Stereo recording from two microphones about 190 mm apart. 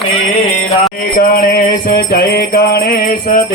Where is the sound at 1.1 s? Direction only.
50° left (ahead or behind).